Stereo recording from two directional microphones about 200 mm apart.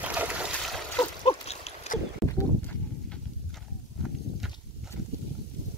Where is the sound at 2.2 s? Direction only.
10° left (ahead or behind).